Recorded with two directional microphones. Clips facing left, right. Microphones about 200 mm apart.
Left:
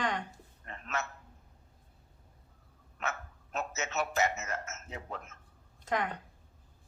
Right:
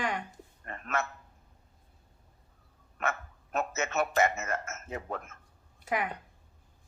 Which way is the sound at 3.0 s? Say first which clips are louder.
Right 4 dB; 55° right (ahead or behind).